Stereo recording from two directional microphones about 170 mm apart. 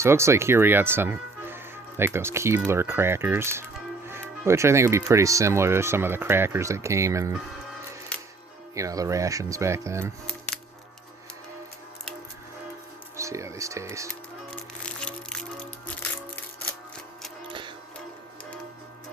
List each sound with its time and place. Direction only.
0.0 s speech: 15° right (ahead or behind)
8.1 s music: 5° left (ahead or behind)
8.7 s speech: 20° right (ahead or behind)
13.1 s speech: 15° right (ahead or behind)
14.8 s music: 5° left (ahead or behind)